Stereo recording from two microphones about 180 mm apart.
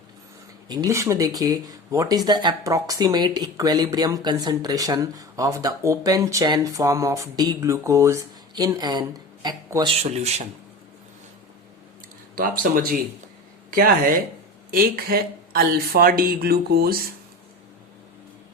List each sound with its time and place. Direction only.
0.7 s speech: 20° right (ahead or behind)
9.9 s speech: 35° right (ahead or behind)
12.4 s speech: 55° right (ahead or behind)